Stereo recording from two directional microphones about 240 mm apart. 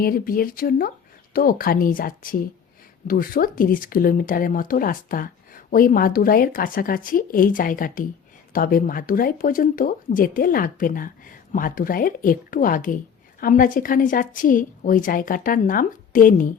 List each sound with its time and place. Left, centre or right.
0.0 s speech: left